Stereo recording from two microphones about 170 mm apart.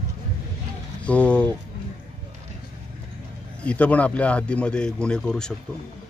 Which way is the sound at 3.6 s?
10° left (ahead or behind).